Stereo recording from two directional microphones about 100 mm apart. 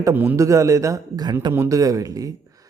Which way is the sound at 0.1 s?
20° right (ahead or behind).